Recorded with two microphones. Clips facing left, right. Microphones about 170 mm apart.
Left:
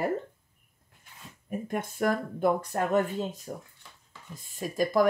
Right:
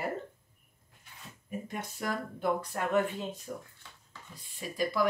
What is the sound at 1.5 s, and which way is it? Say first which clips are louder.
Speech: left 6 dB; 55° left (ahead or behind).